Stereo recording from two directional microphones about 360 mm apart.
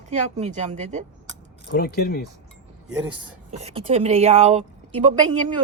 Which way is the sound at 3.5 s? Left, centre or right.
Centre.